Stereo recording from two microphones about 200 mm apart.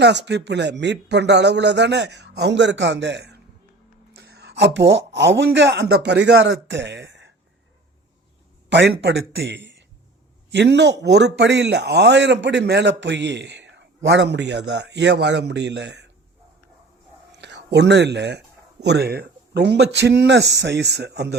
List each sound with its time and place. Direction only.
0.0 s a man's voice: 60° right (ahead or behind)
8.7 s a man's voice: 60° right (ahead or behind)
17.3 s speech: 60° right (ahead or behind)